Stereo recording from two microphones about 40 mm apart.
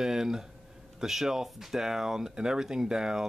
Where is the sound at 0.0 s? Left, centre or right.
Centre.